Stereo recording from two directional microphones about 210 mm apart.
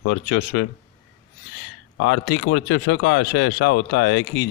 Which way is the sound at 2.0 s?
55° left (ahead or behind).